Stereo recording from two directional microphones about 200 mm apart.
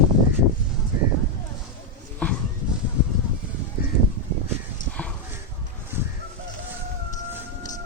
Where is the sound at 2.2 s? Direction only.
5° left (ahead or behind).